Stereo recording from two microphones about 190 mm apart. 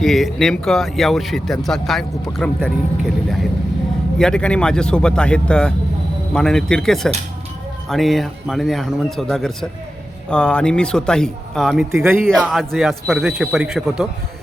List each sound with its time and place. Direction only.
0.0 s speech: centre (ahead or behind)
11.9 s speech: 15° right (ahead or behind)
12.3 s speech: centre (ahead or behind)